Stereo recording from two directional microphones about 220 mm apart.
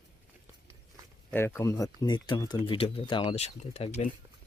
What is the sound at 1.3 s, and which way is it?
Speech, 10° left (ahead or behind).